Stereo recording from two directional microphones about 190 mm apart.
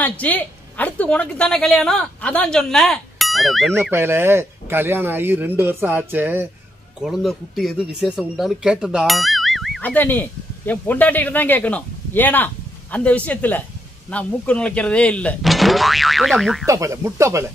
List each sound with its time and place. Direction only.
0.0 s speech: 10° left (ahead or behind)
3.9 s speech: 15° right (ahead or behind)
16.6 s speech: 15° right (ahead or behind)